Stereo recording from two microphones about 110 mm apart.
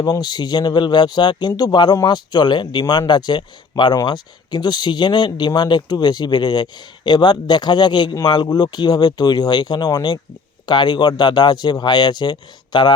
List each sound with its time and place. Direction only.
0.0 s speech: 35° left (ahead or behind)